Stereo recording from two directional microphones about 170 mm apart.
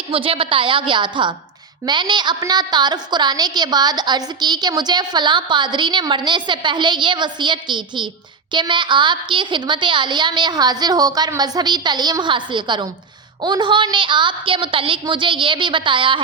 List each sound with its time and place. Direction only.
0.1 s a woman's voice: 35° right (ahead or behind)